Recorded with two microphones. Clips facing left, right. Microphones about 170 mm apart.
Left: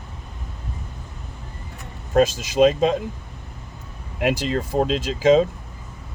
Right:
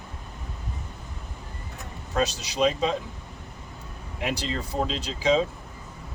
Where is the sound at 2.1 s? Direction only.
50° left (ahead or behind).